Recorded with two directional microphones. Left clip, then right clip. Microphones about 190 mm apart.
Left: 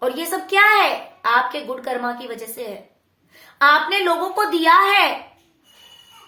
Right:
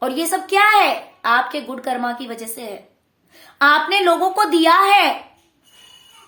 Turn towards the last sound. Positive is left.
turn(degrees=-35)  # may be behind; listen again after turning